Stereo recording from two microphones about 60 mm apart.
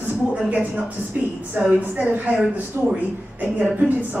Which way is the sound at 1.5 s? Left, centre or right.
Right.